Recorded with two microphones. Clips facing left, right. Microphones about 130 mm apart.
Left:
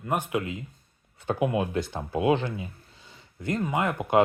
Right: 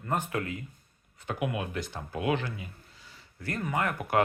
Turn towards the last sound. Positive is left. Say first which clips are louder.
# left 4 dB
turn(degrees=20)  # may be behind; listen again after turning